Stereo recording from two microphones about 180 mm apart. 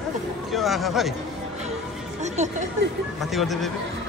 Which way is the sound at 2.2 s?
40° right (ahead or behind).